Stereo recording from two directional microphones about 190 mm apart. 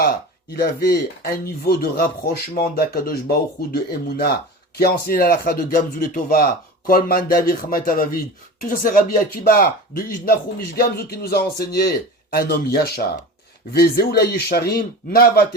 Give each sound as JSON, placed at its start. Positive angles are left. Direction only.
{"t": 0.5, "sound": "speech", "side_deg": 55}
{"t": 4.8, "sound": "speech", "side_deg": 50}